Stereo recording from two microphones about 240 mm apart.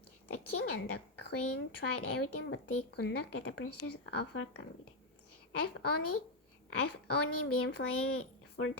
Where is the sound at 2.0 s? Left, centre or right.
Left.